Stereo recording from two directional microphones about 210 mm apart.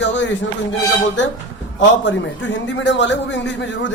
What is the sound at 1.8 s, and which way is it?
A man's voice, 60° left (ahead or behind).